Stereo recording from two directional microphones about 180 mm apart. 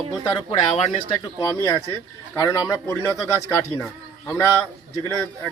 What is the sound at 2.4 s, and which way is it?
Speech, 15° left (ahead or behind).